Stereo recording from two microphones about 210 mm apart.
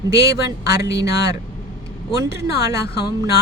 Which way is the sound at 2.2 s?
15° right (ahead or behind).